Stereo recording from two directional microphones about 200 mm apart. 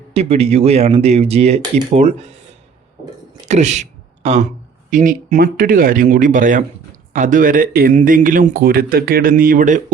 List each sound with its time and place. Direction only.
0.1 s speech: 30° right (ahead or behind)
3.4 s a sound: 35° right (ahead or behind)
4.9 s speech: 40° right (ahead or behind)